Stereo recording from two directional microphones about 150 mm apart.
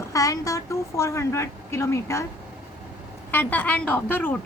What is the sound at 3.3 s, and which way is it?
A woman's voice, 15° left (ahead or behind).